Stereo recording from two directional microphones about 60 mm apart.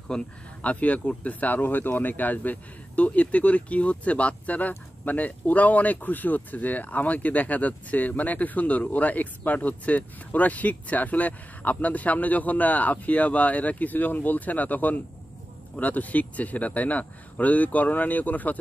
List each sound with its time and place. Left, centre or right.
0.1 s speech: centre
0.6 s speech: left